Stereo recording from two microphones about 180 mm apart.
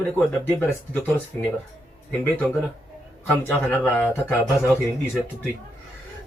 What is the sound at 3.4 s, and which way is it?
Speech, 5° left (ahead or behind).